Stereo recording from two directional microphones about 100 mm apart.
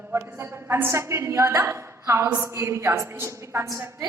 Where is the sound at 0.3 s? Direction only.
25° right (ahead or behind).